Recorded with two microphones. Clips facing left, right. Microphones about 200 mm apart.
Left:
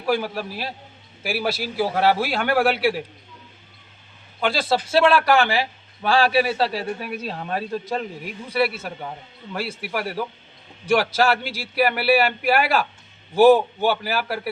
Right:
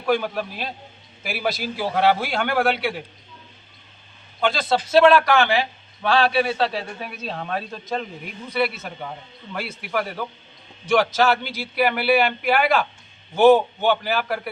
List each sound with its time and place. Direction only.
0.0 s a man's voice: 5° left (ahead or behind)
4.4 s a man's voice: 5° left (ahead or behind)
9.8 s a man's voice: 5° left (ahead or behind)